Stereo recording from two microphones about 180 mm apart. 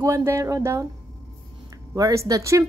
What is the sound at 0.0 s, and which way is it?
A woman's voice, 15° right (ahead or behind).